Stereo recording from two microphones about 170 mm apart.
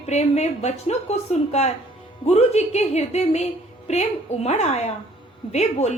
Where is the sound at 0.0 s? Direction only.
40° left (ahead or behind).